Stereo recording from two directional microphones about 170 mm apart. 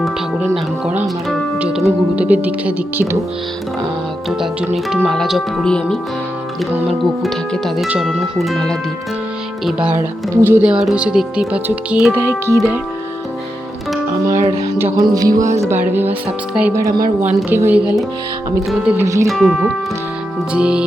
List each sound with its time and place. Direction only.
0.0 s speech: centre (ahead or behind)
1.5 s music: 5° right (ahead or behind)
1.8 s speech: 10° right (ahead or behind)
4.3 s speech: centre (ahead or behind)
7.0 s speech: centre (ahead or behind); by 12.5 s 15° right (ahead or behind)
14.8 s speech: 15° right (ahead or behind)
15.0 s music: 20° right (ahead or behind)
15.6 s speech: 10° right (ahead or behind)
19.0 s speech: 20° right (ahead or behind)
19.3 s speech: centre (ahead or behind)